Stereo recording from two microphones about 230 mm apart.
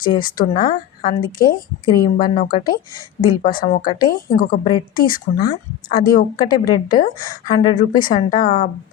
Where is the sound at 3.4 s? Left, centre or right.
Left.